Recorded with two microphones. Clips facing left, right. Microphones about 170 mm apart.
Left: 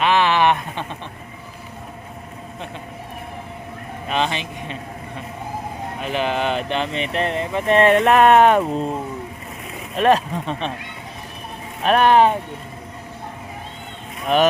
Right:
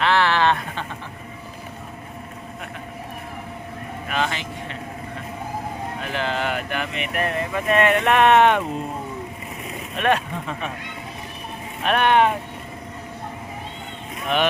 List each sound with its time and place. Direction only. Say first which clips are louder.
0.0 s a sound: left 2 dB; 15° left (ahead or behind)
4.1 s speech: left 3 dB; 20° left (ahead or behind)
6.0 s speech: left 4 dB; 20° left (ahead or behind); by 8.6 s 40° left (ahead or behind)
10.0 s speech: left 5 dB; 35° left (ahead or behind)
11.8 s speech: left 4 dB; 35° left (ahead or behind)
14.3 s speech: left 5 dB; 40° left (ahead or behind)